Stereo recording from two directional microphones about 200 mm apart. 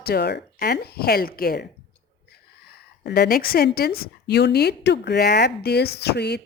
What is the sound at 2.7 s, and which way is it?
A woman's voice, 50° left (ahead or behind).